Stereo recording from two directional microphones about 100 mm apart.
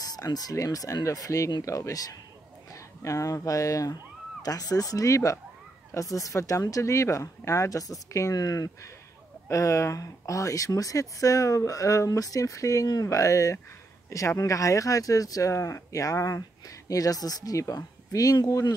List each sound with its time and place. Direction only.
0.0 s speech: 40° left (ahead or behind)